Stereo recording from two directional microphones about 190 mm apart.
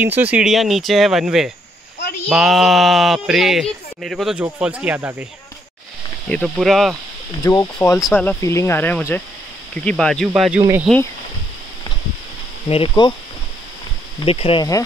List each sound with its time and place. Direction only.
0.0 s speech: 10° right (ahead or behind)
6.2 s speech: 5° left (ahead or behind)
7.4 s speech: 15° left (ahead or behind); by 10.6 s centre (ahead or behind)
12.6 s speech: 30° left (ahead or behind)
14.2 s speech: 30° left (ahead or behind)